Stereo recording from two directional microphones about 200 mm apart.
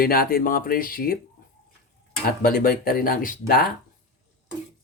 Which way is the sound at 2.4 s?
45° left (ahead or behind).